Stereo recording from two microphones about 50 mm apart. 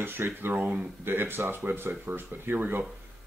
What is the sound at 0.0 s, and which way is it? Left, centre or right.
Speech, right.